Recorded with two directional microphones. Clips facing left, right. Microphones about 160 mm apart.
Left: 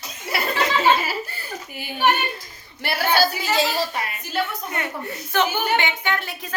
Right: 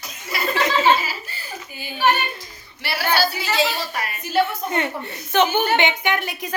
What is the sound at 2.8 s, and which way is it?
Female singing, 45° left (ahead or behind).